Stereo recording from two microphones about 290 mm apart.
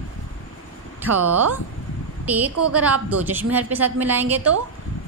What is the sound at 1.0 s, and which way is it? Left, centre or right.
A woman's voice, centre.